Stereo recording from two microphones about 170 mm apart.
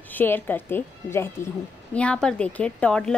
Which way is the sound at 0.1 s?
10° left (ahead or behind).